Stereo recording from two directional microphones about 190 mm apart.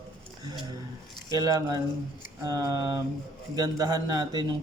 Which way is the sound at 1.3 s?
20° right (ahead or behind).